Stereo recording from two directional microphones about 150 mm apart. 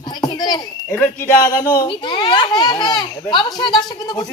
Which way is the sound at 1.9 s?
30° left (ahead or behind).